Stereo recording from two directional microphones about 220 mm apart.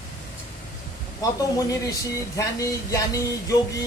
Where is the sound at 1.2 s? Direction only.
15° left (ahead or behind).